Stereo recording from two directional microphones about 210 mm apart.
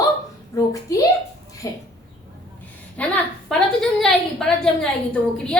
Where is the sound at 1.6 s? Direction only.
15° left (ahead or behind).